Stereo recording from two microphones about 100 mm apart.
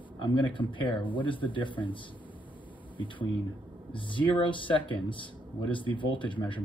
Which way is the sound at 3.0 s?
55° left (ahead or behind).